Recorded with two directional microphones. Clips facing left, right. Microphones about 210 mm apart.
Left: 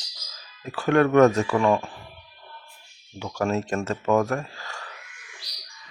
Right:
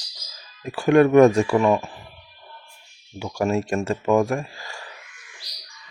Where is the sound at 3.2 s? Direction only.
15° right (ahead or behind).